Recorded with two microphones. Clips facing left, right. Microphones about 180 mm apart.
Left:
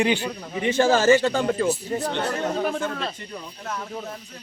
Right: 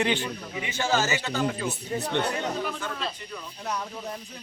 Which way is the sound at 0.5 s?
50° left (ahead or behind).